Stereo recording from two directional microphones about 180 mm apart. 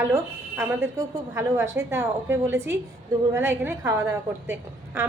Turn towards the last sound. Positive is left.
turn(degrees=-15)  # may be behind; listen again after turning